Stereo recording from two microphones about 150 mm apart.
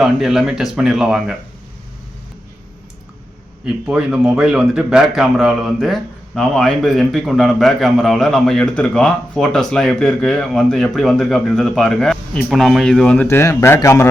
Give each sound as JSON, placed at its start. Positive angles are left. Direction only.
{"t": 0.0, "sound": "speech", "side_deg": 0}
{"t": 3.8, "sound": "speech", "side_deg": -5}
{"t": 13.2, "sound": "a man's voice", "side_deg": 20}